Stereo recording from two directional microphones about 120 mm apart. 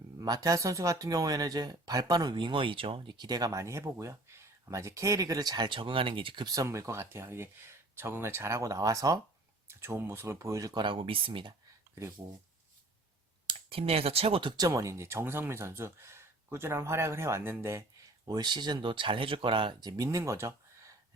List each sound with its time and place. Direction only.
0.2 s speech: 30° right (ahead or behind)
10.8 s speech: 45° right (ahead or behind)
13.5 s speech: 50° right (ahead or behind)
14.5 s speech: 30° right (ahead or behind)
18.3 s speech: 35° right (ahead or behind)